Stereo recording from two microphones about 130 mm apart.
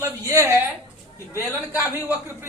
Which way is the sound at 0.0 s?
20° right (ahead or behind).